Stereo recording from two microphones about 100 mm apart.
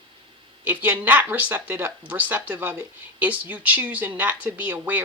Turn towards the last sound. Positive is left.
turn(degrees=-20)  # may be behind; listen again after turning